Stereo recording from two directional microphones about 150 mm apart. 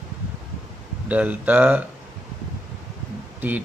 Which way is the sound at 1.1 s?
10° right (ahead or behind).